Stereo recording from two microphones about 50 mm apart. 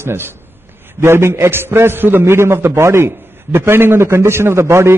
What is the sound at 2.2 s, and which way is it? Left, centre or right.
A man's voice, right.